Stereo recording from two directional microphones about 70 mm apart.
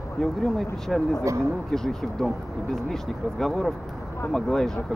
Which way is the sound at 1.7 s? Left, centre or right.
Centre.